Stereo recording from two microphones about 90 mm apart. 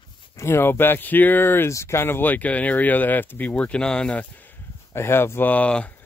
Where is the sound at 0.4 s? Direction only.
25° left (ahead or behind).